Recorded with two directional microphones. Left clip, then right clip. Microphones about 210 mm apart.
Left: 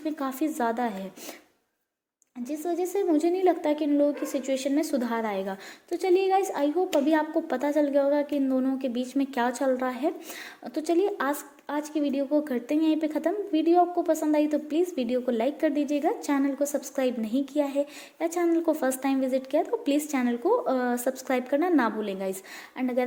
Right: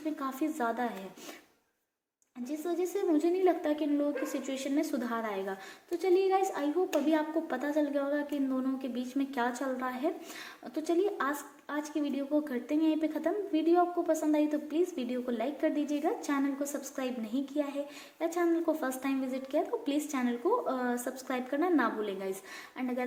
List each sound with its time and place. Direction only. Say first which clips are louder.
0.0 s speech: left 5 dB; 35° left (ahead or behind)
2.4 s a woman's voice: left 4 dB; 35° left (ahead or behind)